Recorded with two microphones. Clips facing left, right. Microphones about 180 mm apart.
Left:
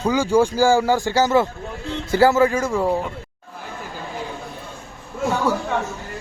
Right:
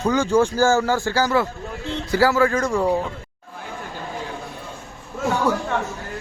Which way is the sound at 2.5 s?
5° left (ahead or behind).